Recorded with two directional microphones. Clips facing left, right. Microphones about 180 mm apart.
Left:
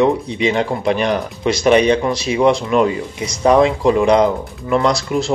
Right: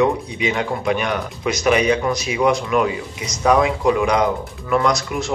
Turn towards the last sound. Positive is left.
turn(degrees=30)  # may be behind; listen again after turning